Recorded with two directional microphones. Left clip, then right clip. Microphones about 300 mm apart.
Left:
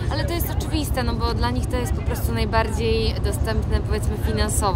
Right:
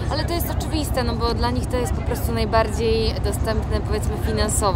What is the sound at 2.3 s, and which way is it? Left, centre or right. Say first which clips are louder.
A woman's voice: right 3 dB; centre.